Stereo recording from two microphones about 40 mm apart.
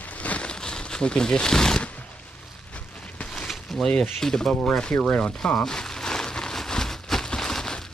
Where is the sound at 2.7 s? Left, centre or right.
Left.